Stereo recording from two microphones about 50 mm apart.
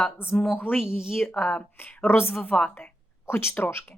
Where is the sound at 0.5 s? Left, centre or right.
Left.